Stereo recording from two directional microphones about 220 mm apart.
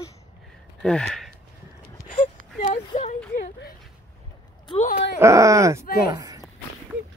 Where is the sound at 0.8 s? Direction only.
5° left (ahead or behind).